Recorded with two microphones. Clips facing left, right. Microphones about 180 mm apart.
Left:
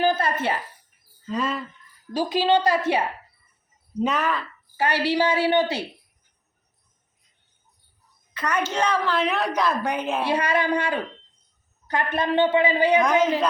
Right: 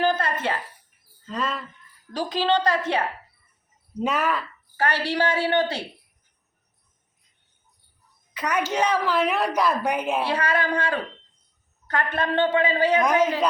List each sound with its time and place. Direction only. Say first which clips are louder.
0.0 s a sound: left 1 dB; 10° left (ahead or behind)
1.3 s a woman's voice: left 2 dB; centre (ahead or behind)
4.0 s a woman's voice: even; 5° right (ahead or behind)
4.8 s a woman's voice: left 2 dB; 10° left (ahead or behind)
8.3 s a sound: even; 10° right (ahead or behind)
8.7 s a woman's voice: right 2 dB; 10° right (ahead or behind)
10.2 s a woman's voice: left 2 dB; 15° left (ahead or behind)